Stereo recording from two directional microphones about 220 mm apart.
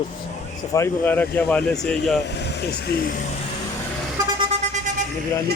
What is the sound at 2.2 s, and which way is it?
Speech, 50° left (ahead or behind).